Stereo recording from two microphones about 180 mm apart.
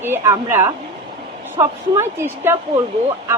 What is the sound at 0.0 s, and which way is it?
Speech, 10° right (ahead or behind).